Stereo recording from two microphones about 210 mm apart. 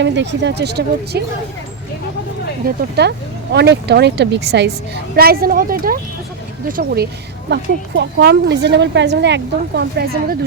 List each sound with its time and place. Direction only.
0.0 s speech: 55° right (ahead or behind)
2.6 s speech: 50° right (ahead or behind)